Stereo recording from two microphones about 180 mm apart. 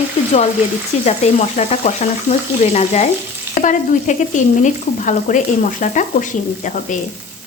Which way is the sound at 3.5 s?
45° left (ahead or behind).